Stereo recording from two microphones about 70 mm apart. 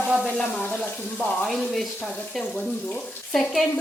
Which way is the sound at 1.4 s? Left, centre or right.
Centre.